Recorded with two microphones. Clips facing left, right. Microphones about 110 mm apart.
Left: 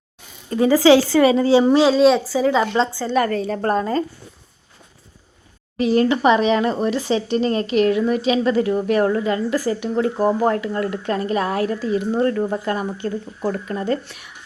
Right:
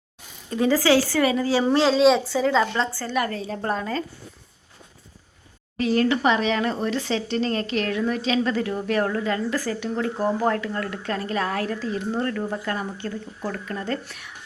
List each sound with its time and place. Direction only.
0.7 s a woman's voice: 20° left (ahead or behind)
1.6 s speech: 10° left (ahead or behind)
3.2 s a woman's voice: 65° left (ahead or behind)
3.8 s speech: 40° left (ahead or behind)
5.7 s speech: 20° left (ahead or behind)
12.3 s a woman's voice: 25° left (ahead or behind)
14.0 s speech: centre (ahead or behind)